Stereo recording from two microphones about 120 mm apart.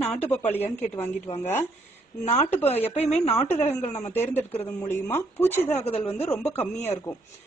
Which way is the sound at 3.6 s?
10° left (ahead or behind).